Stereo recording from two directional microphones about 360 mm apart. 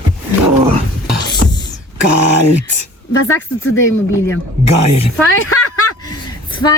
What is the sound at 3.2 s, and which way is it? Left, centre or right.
Speech, left.